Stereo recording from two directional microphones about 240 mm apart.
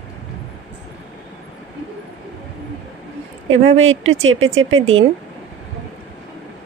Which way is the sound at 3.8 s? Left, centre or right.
Right.